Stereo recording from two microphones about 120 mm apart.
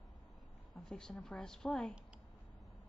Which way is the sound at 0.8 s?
5° left (ahead or behind).